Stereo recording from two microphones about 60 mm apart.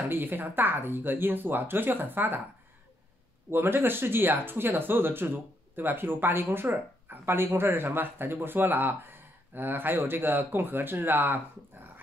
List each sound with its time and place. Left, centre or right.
0.1 s speech: right
3.4 s speech: right